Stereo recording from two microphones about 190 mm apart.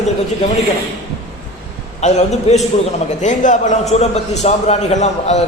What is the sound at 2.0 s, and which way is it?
A man's voice, 35° left (ahead or behind).